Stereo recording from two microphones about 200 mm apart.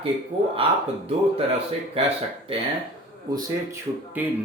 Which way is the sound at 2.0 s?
30° right (ahead or behind).